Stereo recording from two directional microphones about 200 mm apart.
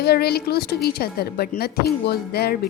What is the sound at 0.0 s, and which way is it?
A woman's voice, 50° left (ahead or behind).